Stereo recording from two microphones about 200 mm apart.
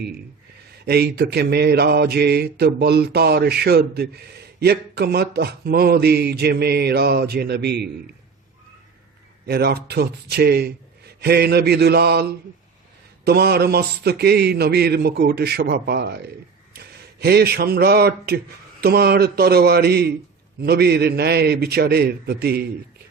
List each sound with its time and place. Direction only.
0.9 s mantra: 50° right (ahead or behind)
9.5 s mantra: 50° right (ahead or behind)
16.7 s a man's voice: 55° right (ahead or behind)
18.8 s mantra: 50° right (ahead or behind)